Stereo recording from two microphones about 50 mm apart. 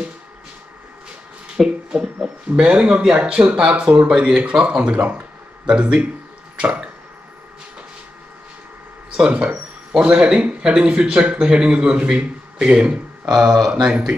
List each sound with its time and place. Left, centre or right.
1.6 s speech: centre
9.1 s speech: centre